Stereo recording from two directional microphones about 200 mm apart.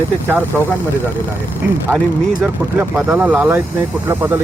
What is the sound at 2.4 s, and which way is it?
Speech, 10° right (ahead or behind).